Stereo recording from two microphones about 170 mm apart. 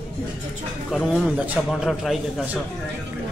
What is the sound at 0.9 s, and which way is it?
A man's voice, centre (ahead or behind).